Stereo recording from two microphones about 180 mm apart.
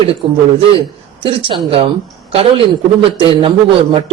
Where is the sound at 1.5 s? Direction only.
30° right (ahead or behind).